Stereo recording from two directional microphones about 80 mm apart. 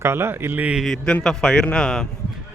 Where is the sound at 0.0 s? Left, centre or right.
Right.